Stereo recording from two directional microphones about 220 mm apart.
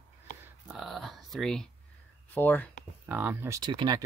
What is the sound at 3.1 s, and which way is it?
Speech, 10° right (ahead or behind).